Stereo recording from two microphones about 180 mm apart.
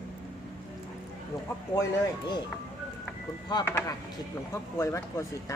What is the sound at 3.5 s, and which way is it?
Speech, 25° left (ahead or behind).